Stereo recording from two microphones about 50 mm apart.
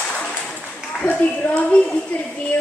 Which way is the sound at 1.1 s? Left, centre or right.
Left.